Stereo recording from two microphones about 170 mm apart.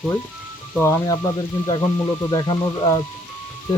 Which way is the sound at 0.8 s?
20° left (ahead or behind).